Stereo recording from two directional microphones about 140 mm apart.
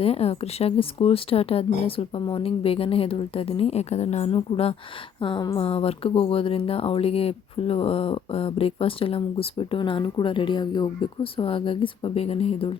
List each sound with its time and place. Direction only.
0.0 s speech: 45° left (ahead or behind)
5.2 s speech: 35° left (ahead or behind)
5.6 s speech: 45° left (ahead or behind)